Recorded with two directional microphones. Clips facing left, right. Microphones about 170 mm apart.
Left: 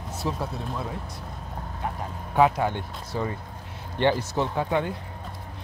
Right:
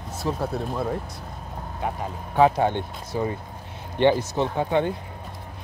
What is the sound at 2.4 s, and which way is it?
Speech, 30° right (ahead or behind).